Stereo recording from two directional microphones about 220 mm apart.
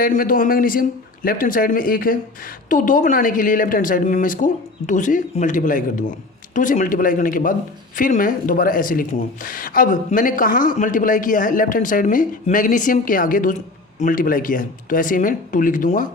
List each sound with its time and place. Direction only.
0.0 s speech: 40° left (ahead or behind)